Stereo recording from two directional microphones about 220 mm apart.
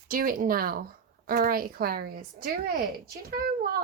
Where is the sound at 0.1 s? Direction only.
40° right (ahead or behind).